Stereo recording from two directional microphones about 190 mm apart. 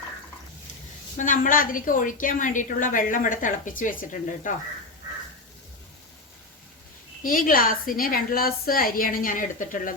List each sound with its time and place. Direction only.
1.1 s a woman's voice: 45° left (ahead or behind)
7.2 s a woman's voice: 45° left (ahead or behind)